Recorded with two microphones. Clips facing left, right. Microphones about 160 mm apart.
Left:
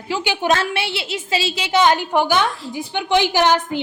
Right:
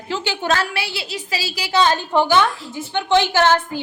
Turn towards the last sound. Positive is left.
turn(degrees=15)  # may be behind; listen again after turning